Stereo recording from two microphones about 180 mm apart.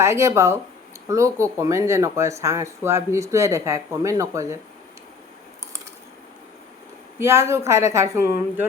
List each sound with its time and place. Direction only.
0.0 s speech: 15° right (ahead or behind)
7.2 s speech: 15° right (ahead or behind)